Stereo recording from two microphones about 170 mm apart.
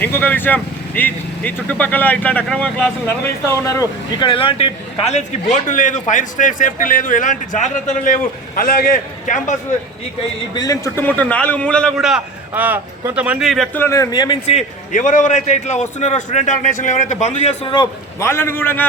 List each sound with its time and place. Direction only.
0.0 s speech: 10° left (ahead or behind)
3.5 s speech: 20° left (ahead or behind)
4.3 s a man's voice: 35° left (ahead or behind); by 9.6 s 50° left (ahead or behind)
10.5 s a man's voice: 20° left (ahead or behind); by 13.7 s centre (ahead or behind)
13.7 s speech: 15° left (ahead or behind)
14.4 s a man's voice: 45° left (ahead or behind)
17.7 s speech: 15° left (ahead or behind)